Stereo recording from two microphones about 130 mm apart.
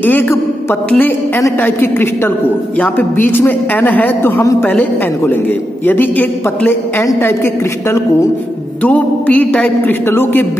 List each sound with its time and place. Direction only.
0.0 s a woman's voice: 15° left (ahead or behind)